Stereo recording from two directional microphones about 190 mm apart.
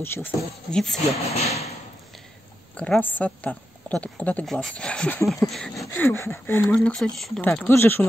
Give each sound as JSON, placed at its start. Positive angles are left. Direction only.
{"t": 0.0, "sound": "speech", "side_deg": 10}
{"t": 1.3, "sound": "speech", "side_deg": 35}
{"t": 2.7, "sound": "speech", "side_deg": 5}
{"t": 5.9, "sound": "speech", "side_deg": 10}